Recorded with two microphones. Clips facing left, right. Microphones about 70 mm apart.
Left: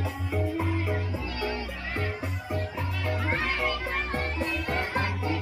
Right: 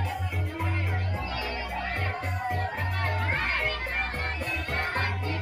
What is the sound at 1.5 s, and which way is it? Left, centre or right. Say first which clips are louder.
Music: right 1 dB; right.